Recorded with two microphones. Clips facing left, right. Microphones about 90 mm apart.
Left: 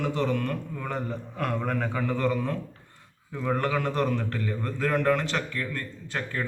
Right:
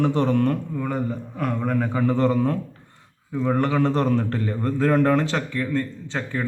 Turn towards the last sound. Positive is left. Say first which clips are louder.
# right 4 dB
turn(degrees=-25)  # may be behind; listen again after turning